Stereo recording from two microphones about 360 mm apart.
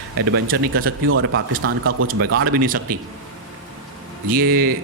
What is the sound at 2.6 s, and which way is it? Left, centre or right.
Speech, right.